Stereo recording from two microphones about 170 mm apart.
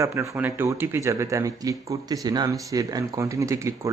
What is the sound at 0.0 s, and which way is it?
Speech, 15° right (ahead or behind).